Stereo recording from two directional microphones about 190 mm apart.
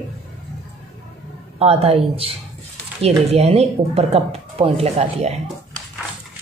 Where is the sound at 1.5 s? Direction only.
30° right (ahead or behind).